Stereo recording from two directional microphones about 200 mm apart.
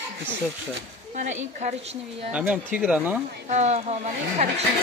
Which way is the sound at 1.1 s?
35° right (ahead or behind).